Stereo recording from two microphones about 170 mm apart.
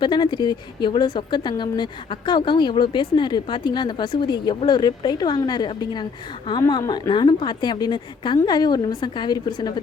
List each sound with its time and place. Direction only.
0.0 s speech: 25° left (ahead or behind)